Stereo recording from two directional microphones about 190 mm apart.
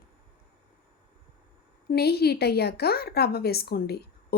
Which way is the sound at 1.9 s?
55° left (ahead or behind).